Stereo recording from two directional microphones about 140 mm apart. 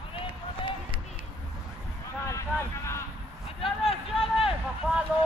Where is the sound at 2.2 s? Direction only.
20° left (ahead or behind).